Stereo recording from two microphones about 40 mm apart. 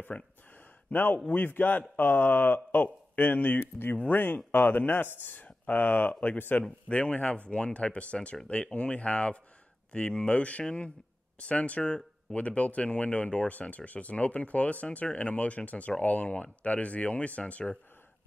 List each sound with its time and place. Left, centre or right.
0.1 s speech: left
1.3 s a man's voice: left
6.9 s speech: left
11.8 s speech: left
12.4 s speech: left